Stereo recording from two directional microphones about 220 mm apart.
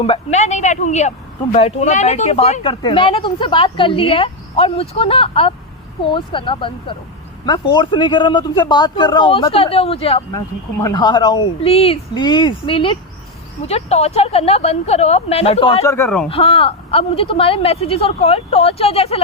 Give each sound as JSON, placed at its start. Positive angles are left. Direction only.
{"t": 0.0, "sound": "a woman's voice", "side_deg": 30}
{"t": 10.3, "sound": "speech", "side_deg": 15}
{"t": 15.8, "sound": "speech", "side_deg": 10}
{"t": 16.3, "sound": "speech", "side_deg": 25}